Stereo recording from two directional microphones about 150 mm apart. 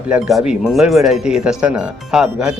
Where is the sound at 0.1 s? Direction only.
5° right (ahead or behind).